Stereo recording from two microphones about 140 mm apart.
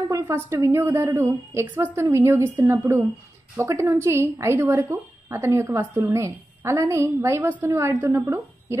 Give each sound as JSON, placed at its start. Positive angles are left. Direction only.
{"t": 0.1, "sound": "a woman's voice", "side_deg": -20}